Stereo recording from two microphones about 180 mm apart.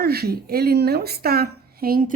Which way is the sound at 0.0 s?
60° right (ahead or behind).